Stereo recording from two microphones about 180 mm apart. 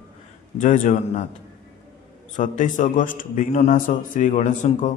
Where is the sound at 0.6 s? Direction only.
45° left (ahead or behind).